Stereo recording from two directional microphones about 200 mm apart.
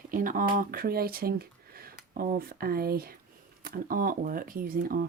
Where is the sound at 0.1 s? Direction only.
40° right (ahead or behind).